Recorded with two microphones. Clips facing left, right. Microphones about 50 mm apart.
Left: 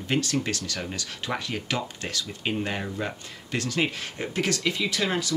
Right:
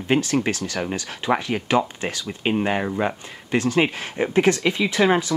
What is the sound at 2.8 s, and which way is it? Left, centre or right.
Speech, right.